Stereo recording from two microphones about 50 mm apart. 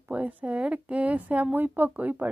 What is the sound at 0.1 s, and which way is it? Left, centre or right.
A woman's voice, right.